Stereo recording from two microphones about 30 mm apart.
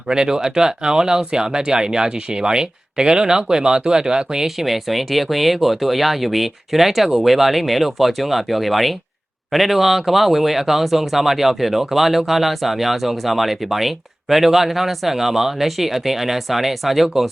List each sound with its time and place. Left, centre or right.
0.1 s speech: right
4.4 s speech: centre